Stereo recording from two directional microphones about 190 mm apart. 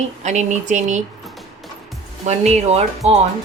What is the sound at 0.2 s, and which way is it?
Speech, 40° right (ahead or behind).